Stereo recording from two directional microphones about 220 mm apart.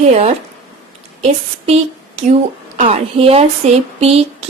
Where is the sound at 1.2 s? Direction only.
25° right (ahead or behind).